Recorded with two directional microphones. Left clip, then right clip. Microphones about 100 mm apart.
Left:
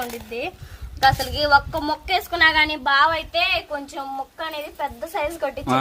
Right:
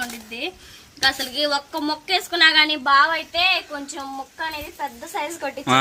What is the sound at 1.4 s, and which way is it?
Speech, 20° right (ahead or behind).